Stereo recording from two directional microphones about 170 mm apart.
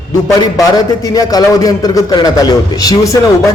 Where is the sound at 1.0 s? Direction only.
20° left (ahead or behind).